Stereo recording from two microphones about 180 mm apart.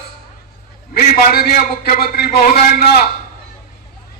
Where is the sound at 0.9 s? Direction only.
55° left (ahead or behind).